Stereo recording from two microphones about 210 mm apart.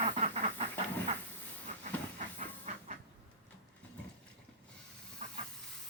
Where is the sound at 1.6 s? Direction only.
35° right (ahead or behind).